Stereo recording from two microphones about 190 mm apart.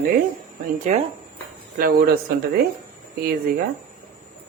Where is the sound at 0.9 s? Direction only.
40° right (ahead or behind).